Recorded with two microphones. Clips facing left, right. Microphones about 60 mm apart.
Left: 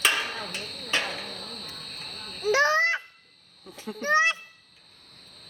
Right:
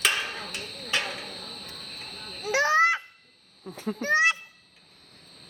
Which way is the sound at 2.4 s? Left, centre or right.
Centre.